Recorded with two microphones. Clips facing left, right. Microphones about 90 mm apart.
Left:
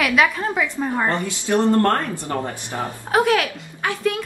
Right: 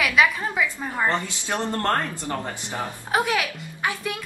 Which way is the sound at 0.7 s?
15° left (ahead or behind).